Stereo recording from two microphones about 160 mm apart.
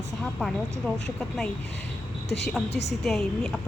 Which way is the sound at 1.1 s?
5° left (ahead or behind).